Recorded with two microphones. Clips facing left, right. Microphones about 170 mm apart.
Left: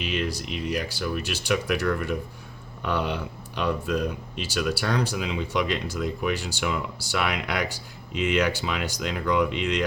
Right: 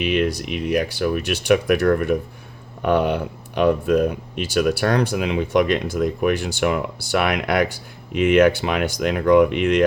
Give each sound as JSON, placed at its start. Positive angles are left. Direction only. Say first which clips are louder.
{"t": 0.0, "sound": "speech", "louder": "right 8 dB", "side_deg": -60}